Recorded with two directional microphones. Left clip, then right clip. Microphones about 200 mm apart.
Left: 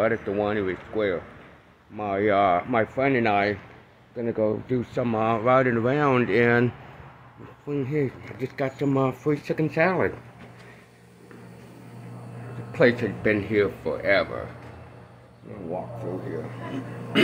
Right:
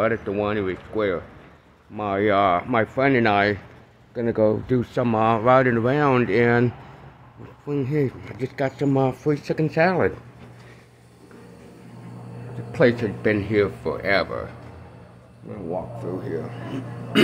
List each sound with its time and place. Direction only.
0.0 s speech: 5° right (ahead or behind)
12.7 s speech: 10° right (ahead or behind)
16.0 s speech: 15° right (ahead or behind)